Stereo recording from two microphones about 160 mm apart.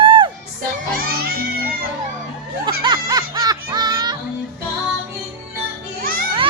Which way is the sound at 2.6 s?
25° right (ahead or behind).